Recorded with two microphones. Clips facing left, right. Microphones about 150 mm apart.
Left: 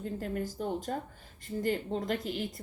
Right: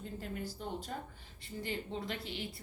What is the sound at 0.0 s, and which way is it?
A woman's voice, 45° left (ahead or behind).